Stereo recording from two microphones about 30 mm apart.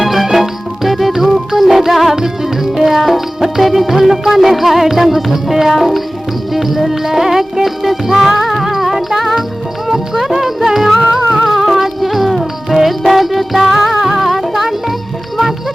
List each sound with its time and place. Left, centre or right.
0.0 s music: centre
7.9 s music: centre
9.9 s speech: centre
10.8 s music: centre
11.0 s music: centre
11.3 s music: centre